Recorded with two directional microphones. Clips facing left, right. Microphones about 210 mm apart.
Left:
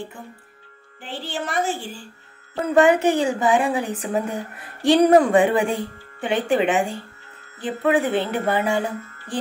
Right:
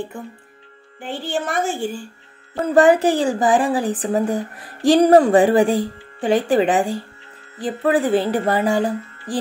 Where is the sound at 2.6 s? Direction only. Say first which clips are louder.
Right 2 dB; 35° right (ahead or behind).